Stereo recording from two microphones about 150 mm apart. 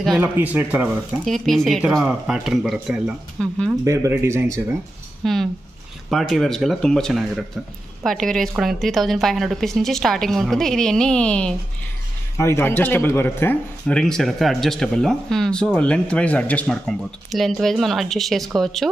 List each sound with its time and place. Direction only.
0.2 s speech: 10° right (ahead or behind)
1.2 s speech: centre (ahead or behind)
3.8 s speech: 20° right (ahead or behind)
5.2 s speech: centre (ahead or behind)